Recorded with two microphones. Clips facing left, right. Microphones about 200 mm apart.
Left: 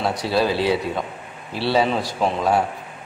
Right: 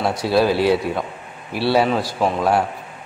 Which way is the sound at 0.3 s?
10° right (ahead or behind).